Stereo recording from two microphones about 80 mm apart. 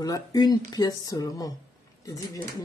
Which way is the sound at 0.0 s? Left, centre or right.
Left.